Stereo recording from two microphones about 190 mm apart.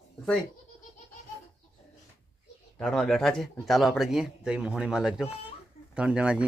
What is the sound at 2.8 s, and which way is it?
Speech, 5° left (ahead or behind).